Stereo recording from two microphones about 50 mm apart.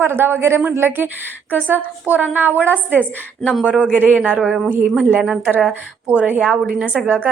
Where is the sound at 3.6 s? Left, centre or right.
Right.